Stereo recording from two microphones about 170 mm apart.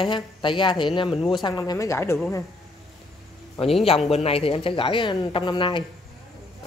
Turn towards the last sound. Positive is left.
turn(degrees=25)  # may be behind; listen again after turning